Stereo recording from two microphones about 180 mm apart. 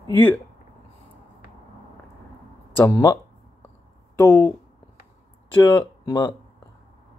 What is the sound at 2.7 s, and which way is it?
Speech, 15° left (ahead or behind).